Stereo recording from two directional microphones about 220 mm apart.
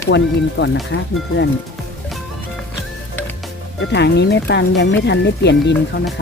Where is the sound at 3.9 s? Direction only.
50° left (ahead or behind).